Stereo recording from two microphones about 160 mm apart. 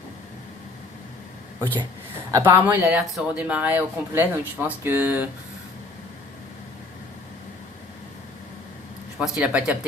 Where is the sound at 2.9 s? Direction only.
5° right (ahead or behind).